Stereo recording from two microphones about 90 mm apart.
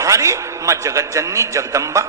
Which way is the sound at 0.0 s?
35° right (ahead or behind).